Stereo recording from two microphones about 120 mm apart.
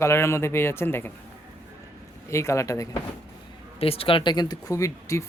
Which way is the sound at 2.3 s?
25° left (ahead or behind).